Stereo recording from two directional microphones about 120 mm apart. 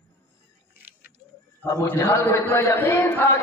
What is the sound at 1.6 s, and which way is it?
A man's voice, 20° left (ahead or behind).